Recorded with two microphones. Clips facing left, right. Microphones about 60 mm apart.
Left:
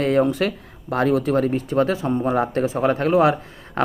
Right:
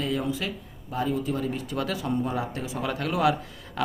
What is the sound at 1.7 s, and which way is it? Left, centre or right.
Speech, left.